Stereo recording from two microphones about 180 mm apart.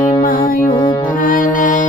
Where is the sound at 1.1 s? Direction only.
50° left (ahead or behind).